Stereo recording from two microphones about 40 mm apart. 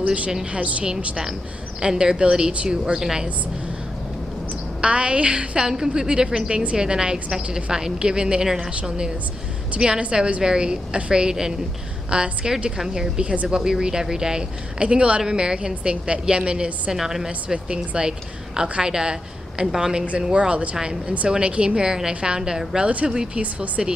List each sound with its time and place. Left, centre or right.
0.0 s a woman's voice: right
0.8 s a woman's voice: centre
4.8 s speech: right
5.6 s a woman's voice: centre
6.5 s a woman's voice: right
16.9 s a woman's voice: centre
17.6 s a woman's voice: right